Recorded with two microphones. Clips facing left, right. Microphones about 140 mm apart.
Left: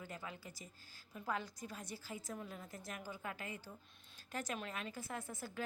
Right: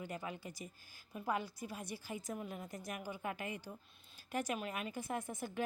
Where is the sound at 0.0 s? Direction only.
20° right (ahead or behind).